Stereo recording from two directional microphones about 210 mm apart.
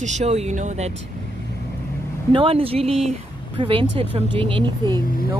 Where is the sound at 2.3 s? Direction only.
25° right (ahead or behind).